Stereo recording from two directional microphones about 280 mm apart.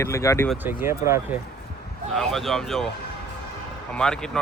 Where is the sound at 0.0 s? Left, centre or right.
Centre.